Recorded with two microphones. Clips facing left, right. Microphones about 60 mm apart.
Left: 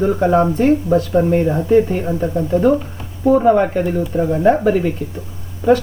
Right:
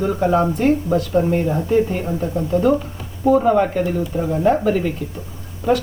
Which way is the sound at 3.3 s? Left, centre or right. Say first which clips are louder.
Left 2 dB; centre.